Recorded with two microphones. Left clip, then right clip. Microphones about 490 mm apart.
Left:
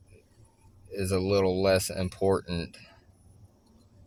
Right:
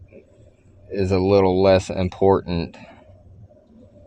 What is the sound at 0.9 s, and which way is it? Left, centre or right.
Speech, left.